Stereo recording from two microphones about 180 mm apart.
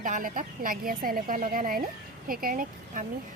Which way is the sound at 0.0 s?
50° right (ahead or behind).